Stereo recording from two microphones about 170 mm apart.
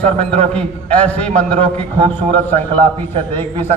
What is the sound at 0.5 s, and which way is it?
A man's voice, 10° left (ahead or behind).